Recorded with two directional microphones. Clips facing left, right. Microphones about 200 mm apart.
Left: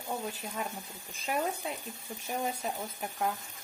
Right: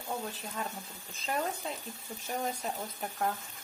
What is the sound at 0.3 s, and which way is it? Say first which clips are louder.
Speech: left 2 dB; 15° left (ahead or behind).